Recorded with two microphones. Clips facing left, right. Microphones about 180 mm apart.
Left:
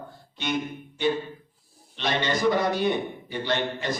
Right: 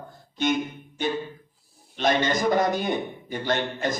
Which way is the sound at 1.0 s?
45° right (ahead or behind).